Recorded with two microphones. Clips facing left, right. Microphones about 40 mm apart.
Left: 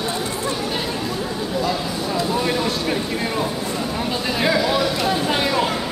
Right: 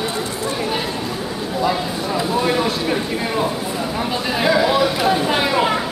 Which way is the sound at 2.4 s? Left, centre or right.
Centre.